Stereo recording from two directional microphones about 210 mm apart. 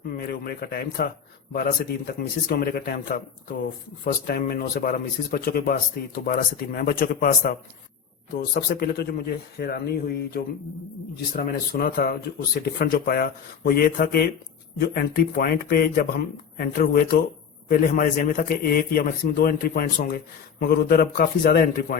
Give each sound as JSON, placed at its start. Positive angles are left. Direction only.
{"t": 0.1, "sound": "a man's voice", "side_deg": 45}